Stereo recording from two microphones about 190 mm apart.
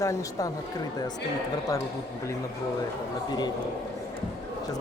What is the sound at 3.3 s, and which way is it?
Speech, 20° left (ahead or behind).